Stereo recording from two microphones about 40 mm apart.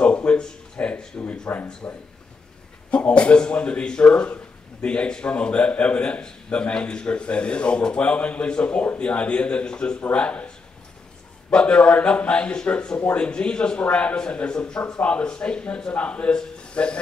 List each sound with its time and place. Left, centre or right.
0.0 s a sound: left
1.5 s speech: left
1.8 s speech: left
2.9 s a man's voice: left
11.5 s a man's voice: left